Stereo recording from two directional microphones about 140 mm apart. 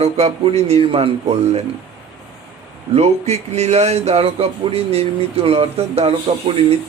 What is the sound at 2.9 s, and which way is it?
Speech, 50° right (ahead or behind).